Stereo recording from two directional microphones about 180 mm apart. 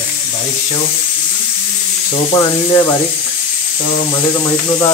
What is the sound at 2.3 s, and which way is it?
Speech, 15° left (ahead or behind).